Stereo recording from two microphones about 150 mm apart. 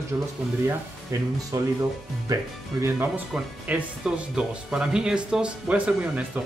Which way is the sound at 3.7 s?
10° right (ahead or behind).